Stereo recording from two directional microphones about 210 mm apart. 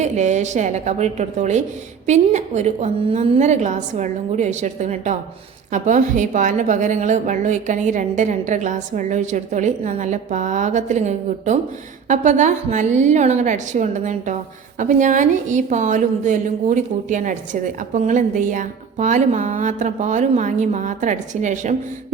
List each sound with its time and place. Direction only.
0.0 s a woman's voice: 35° right (ahead or behind)